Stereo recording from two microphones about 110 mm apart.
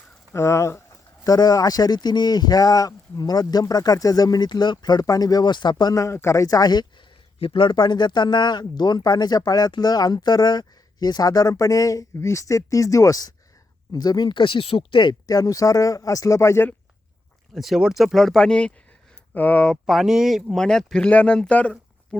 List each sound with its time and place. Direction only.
0.3 s speech: 25° left (ahead or behind)
7.3 s speech: 55° left (ahead or behind); by 16.7 s 20° left (ahead or behind)
17.5 s speech: centre (ahead or behind)